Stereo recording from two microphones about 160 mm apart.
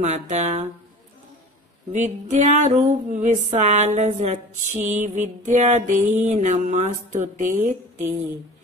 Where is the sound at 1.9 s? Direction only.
50° right (ahead or behind).